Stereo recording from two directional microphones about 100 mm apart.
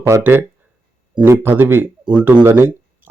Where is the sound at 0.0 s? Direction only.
20° right (ahead or behind).